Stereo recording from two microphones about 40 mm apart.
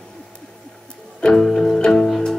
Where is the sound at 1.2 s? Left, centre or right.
Centre.